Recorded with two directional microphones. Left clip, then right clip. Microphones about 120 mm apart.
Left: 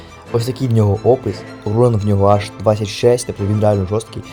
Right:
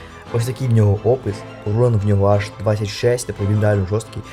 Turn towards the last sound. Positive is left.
turn(degrees=30)  # may be behind; listen again after turning